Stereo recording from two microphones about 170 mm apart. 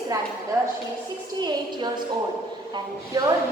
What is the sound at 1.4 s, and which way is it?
Speech, 25° right (ahead or behind).